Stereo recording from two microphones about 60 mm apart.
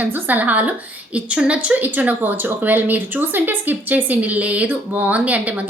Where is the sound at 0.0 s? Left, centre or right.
Right.